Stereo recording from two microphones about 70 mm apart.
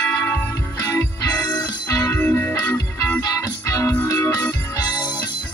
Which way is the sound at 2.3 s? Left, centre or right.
Left.